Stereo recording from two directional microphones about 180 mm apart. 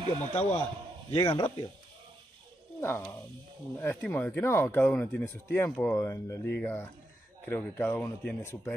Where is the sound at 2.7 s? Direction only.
15° left (ahead or behind).